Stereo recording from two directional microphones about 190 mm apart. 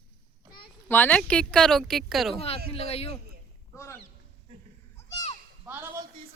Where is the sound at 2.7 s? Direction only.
30° left (ahead or behind).